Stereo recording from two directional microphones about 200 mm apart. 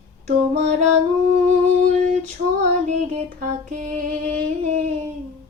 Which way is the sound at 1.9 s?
40° right (ahead or behind).